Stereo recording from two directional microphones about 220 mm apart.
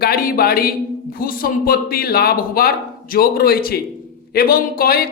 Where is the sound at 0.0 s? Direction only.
45° left (ahead or behind).